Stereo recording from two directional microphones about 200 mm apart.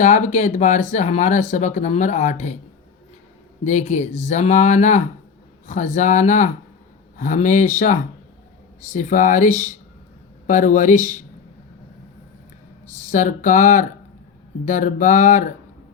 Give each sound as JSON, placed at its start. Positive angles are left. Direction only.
{"t": 0.0, "sound": "speech", "side_deg": 35}
{"t": 3.6, "sound": "speech", "side_deg": 35}
{"t": 13.1, "sound": "speech", "side_deg": 40}